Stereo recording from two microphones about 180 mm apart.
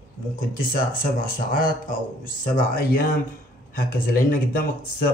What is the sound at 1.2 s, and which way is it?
Speech, 50° left (ahead or behind).